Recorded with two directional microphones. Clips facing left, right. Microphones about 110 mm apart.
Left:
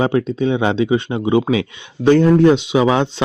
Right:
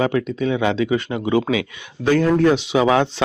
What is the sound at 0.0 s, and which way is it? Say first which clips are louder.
Speech: left 3 dB; 30° left (ahead or behind).